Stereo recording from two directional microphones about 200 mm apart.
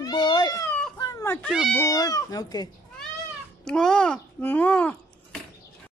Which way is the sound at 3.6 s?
5° left (ahead or behind).